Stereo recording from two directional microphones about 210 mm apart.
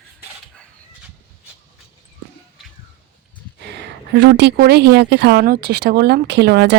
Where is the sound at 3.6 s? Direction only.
55° right (ahead or behind).